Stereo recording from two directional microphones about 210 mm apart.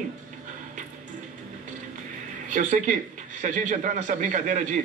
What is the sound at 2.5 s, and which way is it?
A man's voice, 35° right (ahead or behind).